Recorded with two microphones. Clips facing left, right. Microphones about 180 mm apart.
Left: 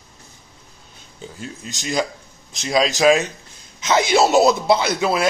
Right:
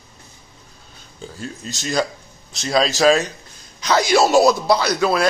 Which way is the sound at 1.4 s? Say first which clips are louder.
Right 2 dB; 15° left (ahead or behind).